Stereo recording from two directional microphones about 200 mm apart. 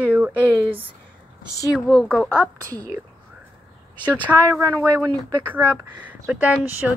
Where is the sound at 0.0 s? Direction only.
5° right (ahead or behind).